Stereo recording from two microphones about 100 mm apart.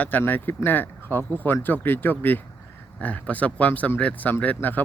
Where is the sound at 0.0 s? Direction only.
20° left (ahead or behind).